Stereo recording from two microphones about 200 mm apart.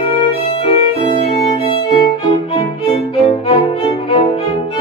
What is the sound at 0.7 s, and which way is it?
Violin, 30° left (ahead or behind).